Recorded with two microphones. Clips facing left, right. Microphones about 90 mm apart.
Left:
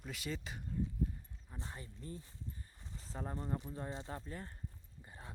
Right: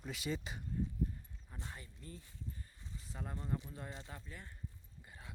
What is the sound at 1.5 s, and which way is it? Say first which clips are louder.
Speech: left 2 dB; 25° left (ahead or behind).